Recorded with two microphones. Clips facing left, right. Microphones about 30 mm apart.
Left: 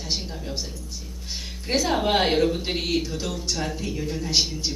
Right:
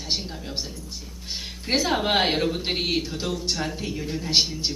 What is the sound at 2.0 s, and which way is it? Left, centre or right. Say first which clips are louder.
A woman's voice: left 1 dB; centre.